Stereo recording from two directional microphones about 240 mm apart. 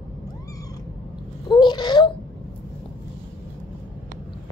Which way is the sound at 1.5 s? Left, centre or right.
Centre.